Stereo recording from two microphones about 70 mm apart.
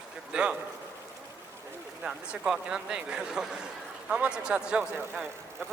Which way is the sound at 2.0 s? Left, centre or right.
Centre.